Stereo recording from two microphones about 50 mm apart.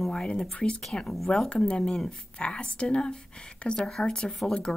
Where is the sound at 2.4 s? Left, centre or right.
Left.